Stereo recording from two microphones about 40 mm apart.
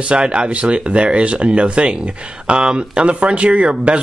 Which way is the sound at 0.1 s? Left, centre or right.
Right.